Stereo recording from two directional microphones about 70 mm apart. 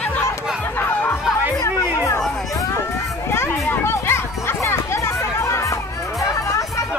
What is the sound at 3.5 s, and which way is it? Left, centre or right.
Music, left.